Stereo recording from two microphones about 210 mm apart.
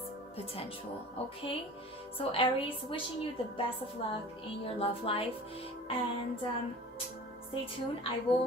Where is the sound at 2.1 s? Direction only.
25° left (ahead or behind).